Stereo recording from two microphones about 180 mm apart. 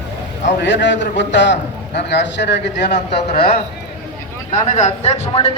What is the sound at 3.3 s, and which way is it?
Speech, 55° left (ahead or behind).